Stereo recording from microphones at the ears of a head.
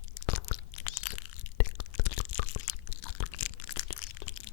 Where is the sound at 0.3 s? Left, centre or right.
Left.